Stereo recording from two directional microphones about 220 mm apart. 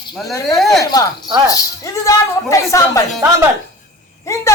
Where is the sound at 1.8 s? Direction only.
15° left (ahead or behind).